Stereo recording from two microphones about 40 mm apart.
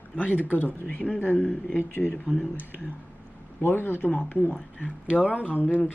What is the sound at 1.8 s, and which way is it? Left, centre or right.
Speech, left.